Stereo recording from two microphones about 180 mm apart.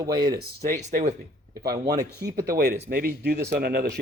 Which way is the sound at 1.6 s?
60° right (ahead or behind).